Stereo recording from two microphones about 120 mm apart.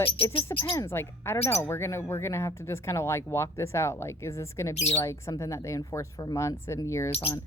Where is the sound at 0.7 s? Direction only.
20° left (ahead or behind).